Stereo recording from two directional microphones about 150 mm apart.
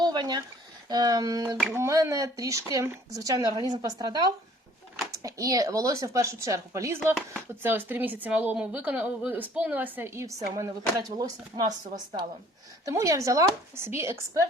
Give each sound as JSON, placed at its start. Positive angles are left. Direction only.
{"t": 0.0, "sound": "a sound", "side_deg": -25}
{"t": 0.9, "sound": "speech", "side_deg": -25}
{"t": 12.8, "sound": "speech", "side_deg": -20}